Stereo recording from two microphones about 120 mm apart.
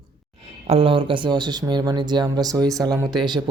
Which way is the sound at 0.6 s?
50° right (ahead or behind).